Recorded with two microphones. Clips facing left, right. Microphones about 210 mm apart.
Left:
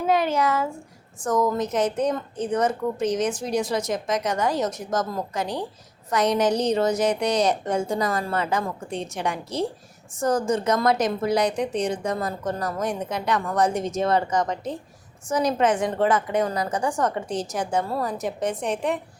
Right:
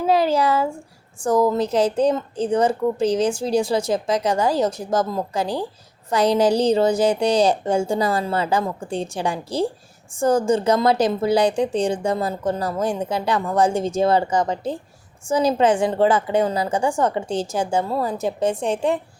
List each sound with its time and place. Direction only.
0.0 s a woman's voice: 35° right (ahead or behind)